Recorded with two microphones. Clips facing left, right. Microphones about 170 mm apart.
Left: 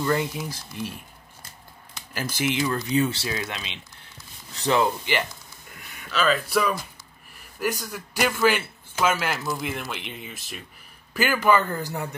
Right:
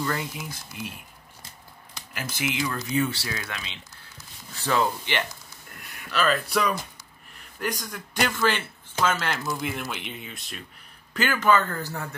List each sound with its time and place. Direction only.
0.0 s speech: 30° left (ahead or behind)
2.1 s speech: 30° left (ahead or behind)
5.8 s a man's voice: centre (ahead or behind); by 12.2 s 15° left (ahead or behind)